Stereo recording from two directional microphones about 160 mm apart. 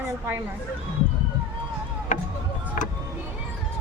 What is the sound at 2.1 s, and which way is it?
Music, 55° left (ahead or behind).